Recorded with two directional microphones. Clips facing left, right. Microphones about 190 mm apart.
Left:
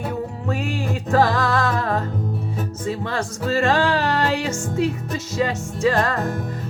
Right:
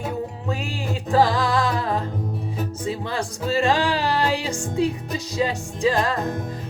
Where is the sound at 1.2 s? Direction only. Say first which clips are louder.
Even; 15° right (ahead or behind).